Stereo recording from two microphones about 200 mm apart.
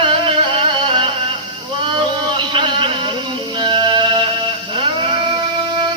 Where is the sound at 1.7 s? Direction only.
25° right (ahead or behind).